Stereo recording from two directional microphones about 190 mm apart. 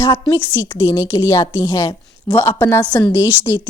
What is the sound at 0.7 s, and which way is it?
A woman's voice, 15° left (ahead or behind).